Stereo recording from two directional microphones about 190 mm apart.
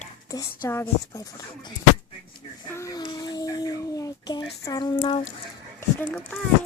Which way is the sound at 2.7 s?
15° left (ahead or behind).